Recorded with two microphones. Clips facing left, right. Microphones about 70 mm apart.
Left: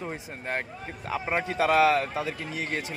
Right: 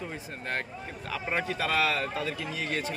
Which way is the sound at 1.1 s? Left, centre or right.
Left.